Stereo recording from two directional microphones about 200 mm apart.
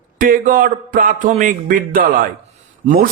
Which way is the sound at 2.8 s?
40° right (ahead or behind).